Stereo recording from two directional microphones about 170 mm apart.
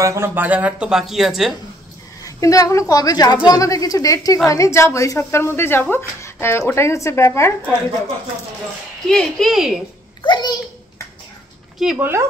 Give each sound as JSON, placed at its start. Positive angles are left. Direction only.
{"t": 0.0, "sound": "speech", "side_deg": -15}
{"t": 2.2, "sound": "a woman's voice", "side_deg": 20}
{"t": 9.1, "sound": "speech", "side_deg": 0}
{"t": 10.2, "sound": "a sound", "side_deg": 25}
{"t": 11.8, "sound": "speech", "side_deg": -5}